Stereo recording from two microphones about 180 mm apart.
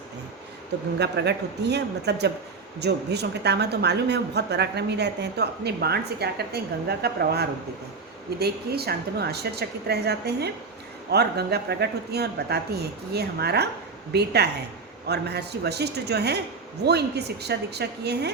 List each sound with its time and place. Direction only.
0.9 s a woman's voice: 70° right (ahead or behind)